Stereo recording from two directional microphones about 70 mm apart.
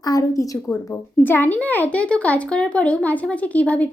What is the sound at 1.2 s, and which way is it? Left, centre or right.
Speech, left.